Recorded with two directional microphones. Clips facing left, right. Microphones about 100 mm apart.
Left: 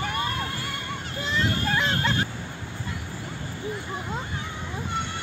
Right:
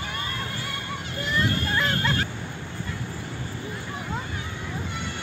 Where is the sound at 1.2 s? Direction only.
25° left (ahead or behind).